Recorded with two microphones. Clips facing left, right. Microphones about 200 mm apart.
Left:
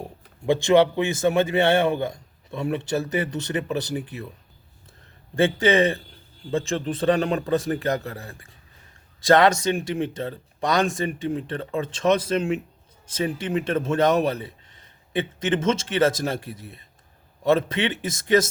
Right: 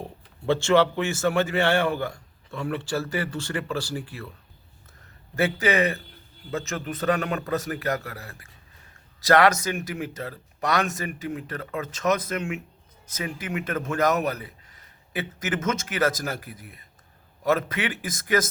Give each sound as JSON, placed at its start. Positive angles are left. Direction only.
{"t": 0.0, "sound": "a man's voice", "side_deg": 15}